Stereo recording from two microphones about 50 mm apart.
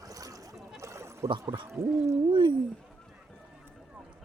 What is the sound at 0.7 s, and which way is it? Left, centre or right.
Gargling, right.